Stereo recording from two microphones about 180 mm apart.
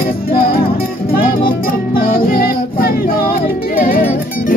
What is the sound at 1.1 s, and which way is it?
Music, 50° left (ahead or behind).